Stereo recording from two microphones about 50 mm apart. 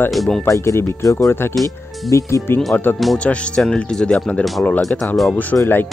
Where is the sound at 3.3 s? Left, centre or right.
Left.